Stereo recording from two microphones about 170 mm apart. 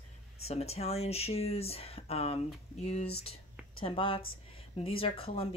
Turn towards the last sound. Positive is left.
turn(degrees=35)  # may be behind; listen again after turning